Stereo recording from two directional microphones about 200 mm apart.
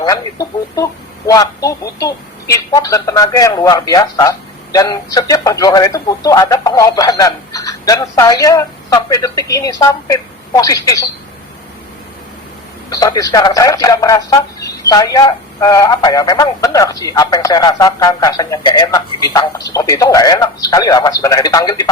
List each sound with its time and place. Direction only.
0.0 s a woman's voice: 15° left (ahead or behind)
12.9 s a woman's voice: 20° left (ahead or behind)